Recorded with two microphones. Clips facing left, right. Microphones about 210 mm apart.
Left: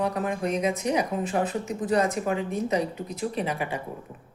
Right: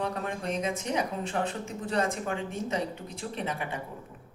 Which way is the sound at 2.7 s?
10° left (ahead or behind).